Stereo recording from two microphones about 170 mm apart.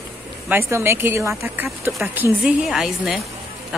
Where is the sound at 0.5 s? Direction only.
15° right (ahead or behind).